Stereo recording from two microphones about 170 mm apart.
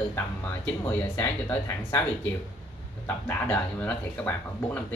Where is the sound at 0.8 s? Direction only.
15° left (ahead or behind).